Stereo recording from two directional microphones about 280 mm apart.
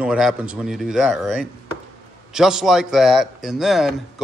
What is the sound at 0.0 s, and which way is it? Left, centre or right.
Speech, centre.